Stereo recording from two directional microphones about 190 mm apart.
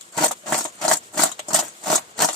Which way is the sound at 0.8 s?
Centre (ahead or behind).